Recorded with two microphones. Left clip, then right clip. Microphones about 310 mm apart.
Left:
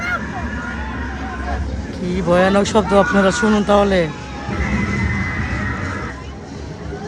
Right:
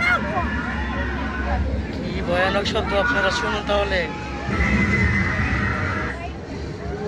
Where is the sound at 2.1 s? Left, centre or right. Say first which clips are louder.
Left 6 dB; left.